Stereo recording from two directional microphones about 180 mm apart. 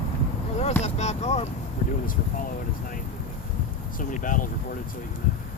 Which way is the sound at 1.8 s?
45° left (ahead or behind).